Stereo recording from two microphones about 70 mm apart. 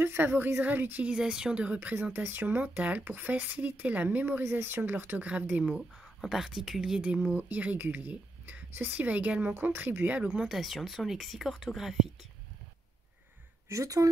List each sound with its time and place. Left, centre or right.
0.0 s a woman's voice: right
1.0 s speech: centre; by 4.4 s right
4.4 s speech: right
5.6 s speech: centre
7.3 s speech: right
10.4 s speech: centre
13.7 s speech: right